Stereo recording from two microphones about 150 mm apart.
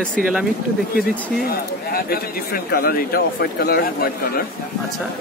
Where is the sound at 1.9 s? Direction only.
80° left.